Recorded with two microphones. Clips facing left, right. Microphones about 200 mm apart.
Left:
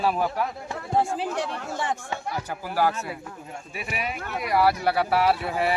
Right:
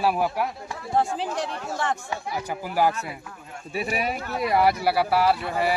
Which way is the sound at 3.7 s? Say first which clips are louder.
Right 6 dB; 35° right (ahead or behind).